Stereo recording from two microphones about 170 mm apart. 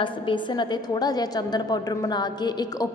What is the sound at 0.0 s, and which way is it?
A woman's voice, 30° left (ahead or behind).